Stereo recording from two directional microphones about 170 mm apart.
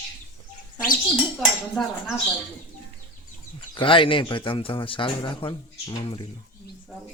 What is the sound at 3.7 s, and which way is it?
Speech, 30° left (ahead or behind).